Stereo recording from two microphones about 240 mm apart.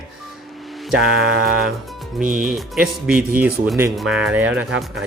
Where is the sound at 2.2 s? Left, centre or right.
Right.